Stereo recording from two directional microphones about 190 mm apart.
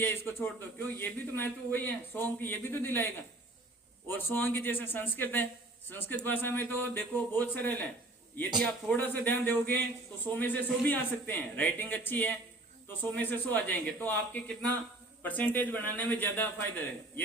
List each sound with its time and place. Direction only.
0.0 s a man's voice: 10° left (ahead or behind)